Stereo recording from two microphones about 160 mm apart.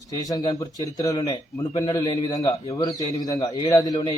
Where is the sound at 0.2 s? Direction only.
25° left (ahead or behind).